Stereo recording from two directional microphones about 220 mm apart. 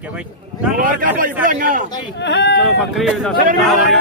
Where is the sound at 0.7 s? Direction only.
40° right (ahead or behind).